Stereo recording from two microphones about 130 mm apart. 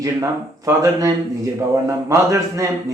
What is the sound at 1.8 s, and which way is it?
Speech, 25° right (ahead or behind).